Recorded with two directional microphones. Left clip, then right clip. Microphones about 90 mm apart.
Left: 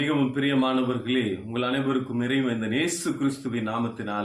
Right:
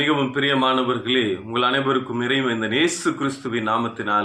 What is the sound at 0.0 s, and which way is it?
A man's voice, 20° left (ahead or behind).